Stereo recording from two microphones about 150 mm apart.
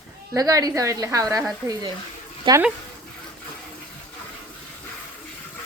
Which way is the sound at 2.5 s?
30° right (ahead or behind).